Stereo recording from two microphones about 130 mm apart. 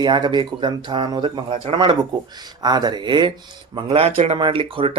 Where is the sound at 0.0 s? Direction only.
35° right (ahead or behind).